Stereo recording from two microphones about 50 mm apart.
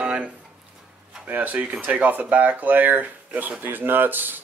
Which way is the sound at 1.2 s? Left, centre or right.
Right.